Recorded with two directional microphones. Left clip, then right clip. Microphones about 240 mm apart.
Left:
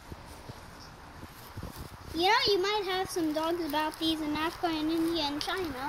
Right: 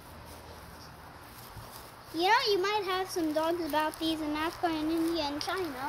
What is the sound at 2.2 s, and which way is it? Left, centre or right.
A child's voice, centre.